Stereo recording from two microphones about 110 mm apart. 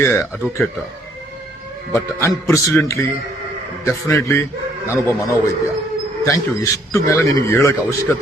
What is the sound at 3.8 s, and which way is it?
Speech, 25° left (ahead or behind).